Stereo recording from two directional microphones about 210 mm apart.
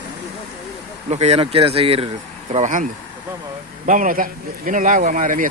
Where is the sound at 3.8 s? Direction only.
40° right (ahead or behind).